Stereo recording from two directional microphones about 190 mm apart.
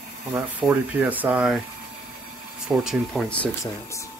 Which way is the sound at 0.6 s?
5° right (ahead or behind).